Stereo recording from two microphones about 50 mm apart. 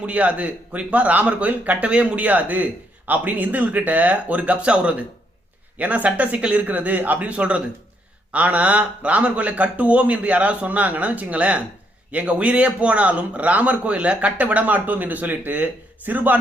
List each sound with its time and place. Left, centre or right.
0.0 s a man's voice: right